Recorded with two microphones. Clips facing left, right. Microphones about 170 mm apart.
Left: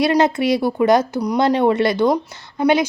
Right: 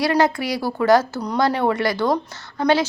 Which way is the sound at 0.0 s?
20° left (ahead or behind).